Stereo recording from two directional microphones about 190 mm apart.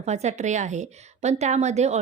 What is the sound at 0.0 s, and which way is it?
A woman's voice, 35° right (ahead or behind).